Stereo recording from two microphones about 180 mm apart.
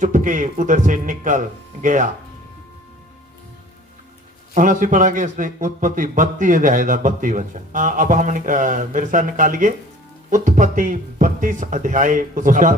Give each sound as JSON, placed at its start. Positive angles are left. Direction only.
{"t": 0.0, "sound": "a man's voice", "side_deg": -45}
{"t": 4.5, "sound": "a man's voice", "side_deg": -45}